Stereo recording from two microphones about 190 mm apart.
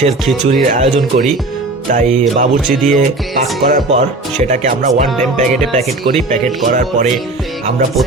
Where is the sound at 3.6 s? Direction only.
40° right (ahead or behind).